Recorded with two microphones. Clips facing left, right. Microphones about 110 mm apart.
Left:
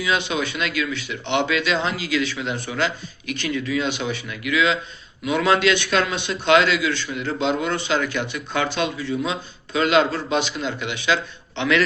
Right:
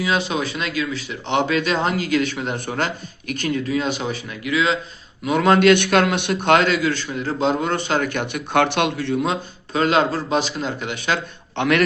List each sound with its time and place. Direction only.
0.0 s a man's voice: 35° right (ahead or behind); by 11.8 s 55° right (ahead or behind)